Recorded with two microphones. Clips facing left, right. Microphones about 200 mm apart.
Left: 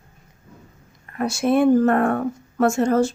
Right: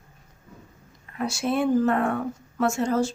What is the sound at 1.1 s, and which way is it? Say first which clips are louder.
Speech: left 6 dB; 55° left (ahead or behind).